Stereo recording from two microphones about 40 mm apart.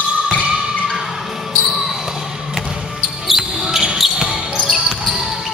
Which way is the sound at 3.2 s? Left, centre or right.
Centre.